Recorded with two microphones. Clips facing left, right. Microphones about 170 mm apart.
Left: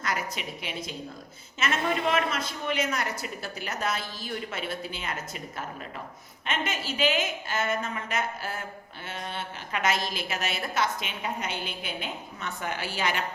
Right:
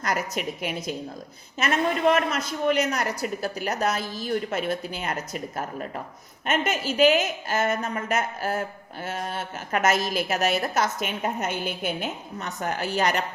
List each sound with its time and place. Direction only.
0.3 s a woman's voice: 45° right (ahead or behind)
6.4 s a woman's voice: 45° right (ahead or behind)